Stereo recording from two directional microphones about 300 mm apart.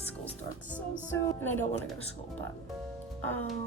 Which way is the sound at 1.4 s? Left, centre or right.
Centre.